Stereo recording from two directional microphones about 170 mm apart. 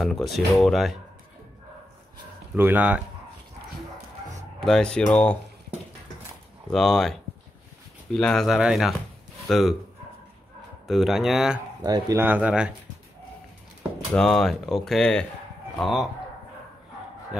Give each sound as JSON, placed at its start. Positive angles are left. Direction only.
{"t": 0.0, "sound": "speech", "side_deg": 0}
{"t": 2.5, "sound": "speech", "side_deg": -10}
{"t": 4.6, "sound": "speech", "side_deg": 5}
{"t": 6.7, "sound": "speech", "side_deg": 0}
{"t": 10.9, "sound": "speech", "side_deg": 0}
{"t": 11.8, "sound": "speech", "side_deg": -20}
{"t": 14.1, "sound": "speech", "side_deg": 0}